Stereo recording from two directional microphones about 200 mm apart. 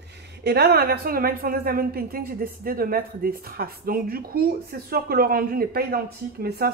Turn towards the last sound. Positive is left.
turn(degrees=-50)  # may be behind; listen again after turning